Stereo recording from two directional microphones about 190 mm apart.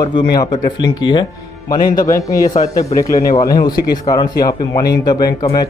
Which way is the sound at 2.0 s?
15° left (ahead or behind).